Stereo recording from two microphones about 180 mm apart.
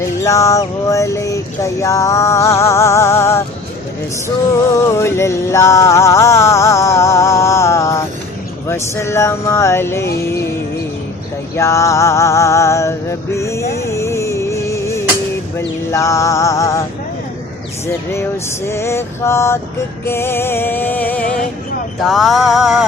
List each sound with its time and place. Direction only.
0.2 s music: 15° left (ahead or behind)
4.7 s music: 15° left (ahead or behind)
11.5 s music: 15° left (ahead or behind)
18.1 s music: 15° left (ahead or behind)
22.0 s mantra: centre (ahead or behind)